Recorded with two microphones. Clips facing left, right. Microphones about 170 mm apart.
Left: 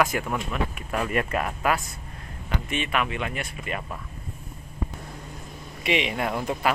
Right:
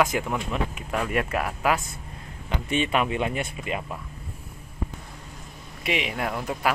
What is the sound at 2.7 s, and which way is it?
Speech, 30° right (ahead or behind).